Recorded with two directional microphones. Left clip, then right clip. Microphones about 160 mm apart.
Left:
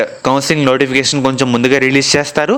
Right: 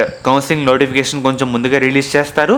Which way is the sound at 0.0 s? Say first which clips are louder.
Even; 30° left (ahead or behind).